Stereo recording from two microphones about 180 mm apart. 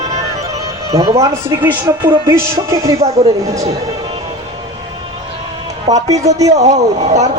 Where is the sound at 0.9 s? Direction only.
20° right (ahead or behind).